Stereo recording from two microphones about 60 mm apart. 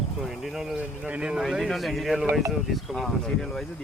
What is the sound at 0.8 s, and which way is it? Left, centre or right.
Speech, right.